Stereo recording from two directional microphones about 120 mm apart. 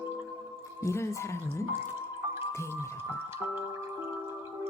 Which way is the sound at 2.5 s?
25° left (ahead or behind).